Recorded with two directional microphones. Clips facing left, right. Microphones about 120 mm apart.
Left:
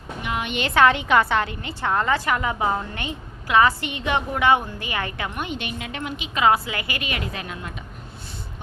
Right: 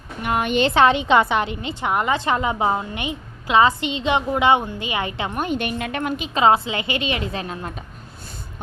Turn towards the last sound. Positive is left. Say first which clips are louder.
# right 4 dB
turn(degrees=-35)  # may be behind; listen again after turning